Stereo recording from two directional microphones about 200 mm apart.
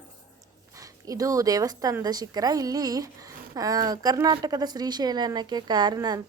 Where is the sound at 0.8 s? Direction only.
15° right (ahead or behind).